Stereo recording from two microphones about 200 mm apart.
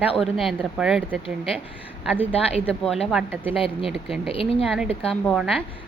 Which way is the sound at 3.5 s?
25° left (ahead or behind).